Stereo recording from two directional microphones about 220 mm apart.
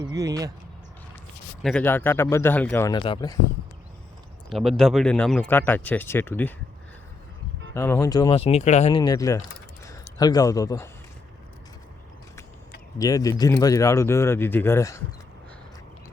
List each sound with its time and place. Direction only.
0.0 s speech: 15° right (ahead or behind)
1.6 s speech: 5° left (ahead or behind)
4.4 s speech: centre (ahead or behind)
7.7 s a man's voice: 10° left (ahead or behind)
13.0 s speech: 15° left (ahead or behind)